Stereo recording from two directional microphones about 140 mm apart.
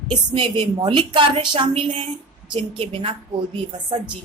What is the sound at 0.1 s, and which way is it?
A woman's voice, 35° right (ahead or behind).